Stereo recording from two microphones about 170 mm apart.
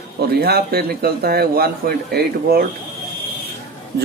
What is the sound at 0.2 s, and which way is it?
A man's voice, 70° right (ahead or behind).